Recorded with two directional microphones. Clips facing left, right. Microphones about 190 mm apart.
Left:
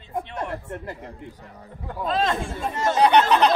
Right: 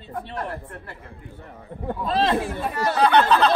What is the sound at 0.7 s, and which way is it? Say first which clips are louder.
Speech: left 6 dB; 20° left (ahead or behind).